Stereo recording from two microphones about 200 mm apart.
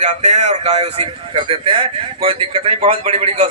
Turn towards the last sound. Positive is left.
turn(degrees=-30)  # may be behind; listen again after turning